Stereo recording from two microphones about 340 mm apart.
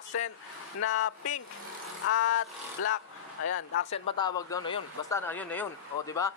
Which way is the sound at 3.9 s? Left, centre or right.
Centre.